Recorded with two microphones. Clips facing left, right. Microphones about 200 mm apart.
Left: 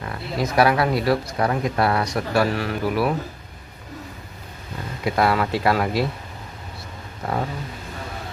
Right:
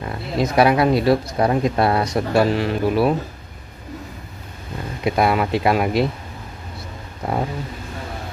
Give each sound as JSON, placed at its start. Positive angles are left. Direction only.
{"t": 0.0, "sound": "speech", "side_deg": -20}
{"t": 5.0, "sound": "speech", "side_deg": -20}